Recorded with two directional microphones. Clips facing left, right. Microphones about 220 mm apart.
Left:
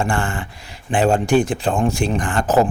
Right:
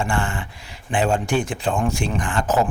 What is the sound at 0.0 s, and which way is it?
A man's voice, 40° left (ahead or behind).